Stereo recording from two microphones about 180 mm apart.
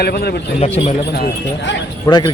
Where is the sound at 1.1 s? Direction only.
60° left (ahead or behind).